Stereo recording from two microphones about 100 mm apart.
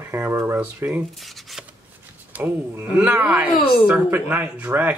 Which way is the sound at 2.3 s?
20° right (ahead or behind).